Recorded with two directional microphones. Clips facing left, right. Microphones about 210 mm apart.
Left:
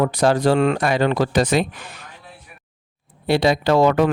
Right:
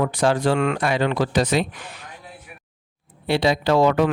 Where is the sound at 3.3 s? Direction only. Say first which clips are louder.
Left 2 dB; 45° left (ahead or behind).